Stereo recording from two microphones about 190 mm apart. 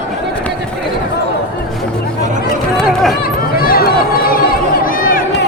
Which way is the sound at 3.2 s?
50° left (ahead or behind).